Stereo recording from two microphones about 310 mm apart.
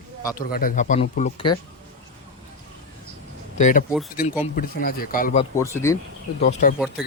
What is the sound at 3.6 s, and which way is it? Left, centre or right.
Speech, left.